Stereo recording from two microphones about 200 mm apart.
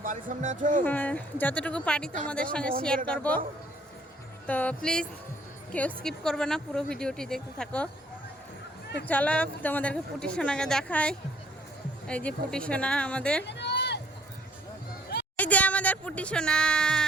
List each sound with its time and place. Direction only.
0.0 s speech: 40° right (ahead or behind)
0.9 s speech: 10° left (ahead or behind)
4.4 s speech: 5° left (ahead or behind)
9.0 s speech: 5° left (ahead or behind)
13.4 s a sound: 60° left (ahead or behind)
15.4 s speech: 5° left (ahead or behind)